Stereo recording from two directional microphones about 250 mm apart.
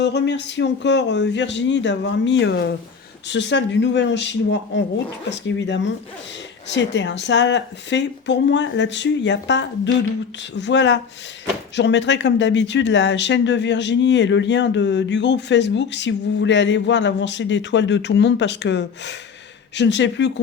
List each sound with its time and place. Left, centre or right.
0.0 s speech: left